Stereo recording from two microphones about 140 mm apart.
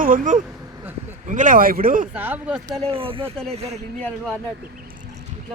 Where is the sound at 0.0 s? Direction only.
70° right (ahead or behind).